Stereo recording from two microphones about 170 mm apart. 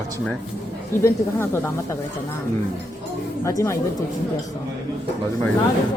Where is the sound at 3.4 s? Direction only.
15° left (ahead or behind).